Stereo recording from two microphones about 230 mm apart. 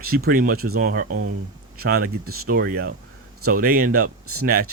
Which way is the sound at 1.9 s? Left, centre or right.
Right.